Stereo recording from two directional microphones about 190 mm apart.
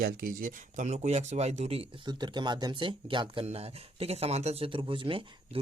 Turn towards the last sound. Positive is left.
turn(degrees=-25)  # may be behind; listen again after turning